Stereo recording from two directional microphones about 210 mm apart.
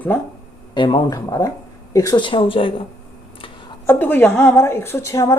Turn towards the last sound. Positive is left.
turn(degrees=15)  # may be behind; listen again after turning